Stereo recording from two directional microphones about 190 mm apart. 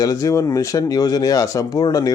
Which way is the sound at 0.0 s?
20° left (ahead or behind).